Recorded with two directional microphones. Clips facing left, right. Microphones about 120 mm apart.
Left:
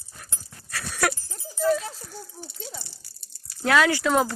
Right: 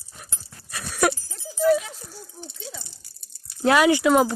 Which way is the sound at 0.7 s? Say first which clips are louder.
Right 4 dB; 20° right (ahead or behind).